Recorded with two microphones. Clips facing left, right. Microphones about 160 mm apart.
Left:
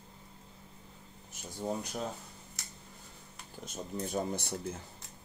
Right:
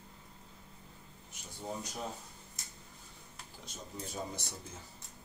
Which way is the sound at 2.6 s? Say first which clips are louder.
Left 3 dB; 75° left (ahead or behind).